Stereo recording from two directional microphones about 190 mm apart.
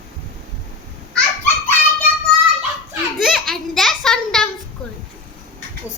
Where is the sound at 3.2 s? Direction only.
Centre (ahead or behind).